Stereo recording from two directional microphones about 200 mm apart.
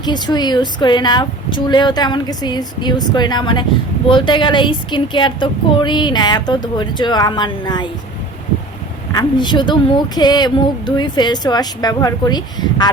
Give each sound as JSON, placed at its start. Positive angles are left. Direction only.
{"t": 0.0, "sound": "a woman's voice", "side_deg": 20}
{"t": 9.1, "sound": "a woman's voice", "side_deg": 20}